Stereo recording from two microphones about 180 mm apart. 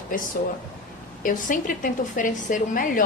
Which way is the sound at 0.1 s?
50° left (ahead or behind).